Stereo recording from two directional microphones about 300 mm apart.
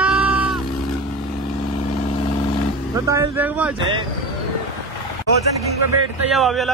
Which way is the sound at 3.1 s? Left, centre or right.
Centre.